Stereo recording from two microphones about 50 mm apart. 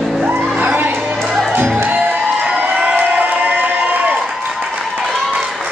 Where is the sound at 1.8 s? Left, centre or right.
Right.